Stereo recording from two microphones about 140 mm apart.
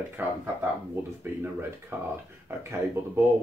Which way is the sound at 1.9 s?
20° right (ahead or behind).